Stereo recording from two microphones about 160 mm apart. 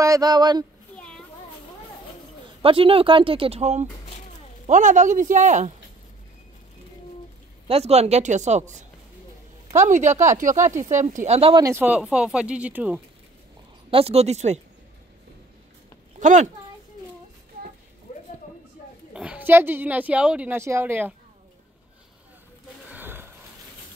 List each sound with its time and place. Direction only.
0.0 s speech: 20° right (ahead or behind)
0.9 s children playing: 5° left (ahead or behind)
2.6 s speech: 35° right (ahead or behind); by 5.7 s 50° right (ahead or behind)
7.6 s speech: 40° right (ahead or behind)
10.6 s a woman's voice: 15° right (ahead or behind)
11.0 s speech: 50° right (ahead or behind)
11.5 s speech: 20° right (ahead or behind)
11.8 s a woman's voice: 5° right (ahead or behind)
13.8 s speech: 35° right (ahead or behind)
16.2 s a woman's voice: 50° right (ahead or behind)
18.1 s a sound: 45° left (ahead or behind)
19.1 s a woman's voice: 10° right (ahead or behind)
22.8 s a sound: 10° right (ahead or behind)